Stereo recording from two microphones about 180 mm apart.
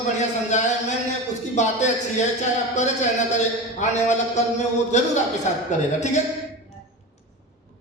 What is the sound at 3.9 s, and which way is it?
A man's voice, 40° left (ahead or behind).